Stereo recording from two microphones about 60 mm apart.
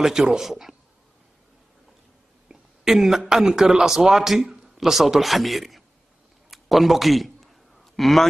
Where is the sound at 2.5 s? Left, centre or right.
Centre.